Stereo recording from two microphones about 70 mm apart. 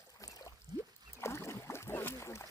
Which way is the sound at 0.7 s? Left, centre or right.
Right.